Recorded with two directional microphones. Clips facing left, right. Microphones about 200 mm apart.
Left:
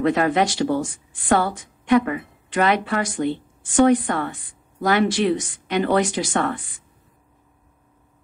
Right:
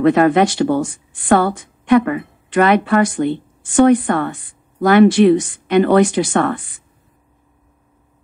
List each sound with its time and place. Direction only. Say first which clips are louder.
0.0 s a woman's voice: right 7 dB; 55° right (ahead or behind)